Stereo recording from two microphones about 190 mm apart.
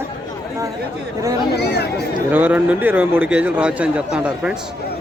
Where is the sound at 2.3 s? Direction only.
10° right (ahead or behind).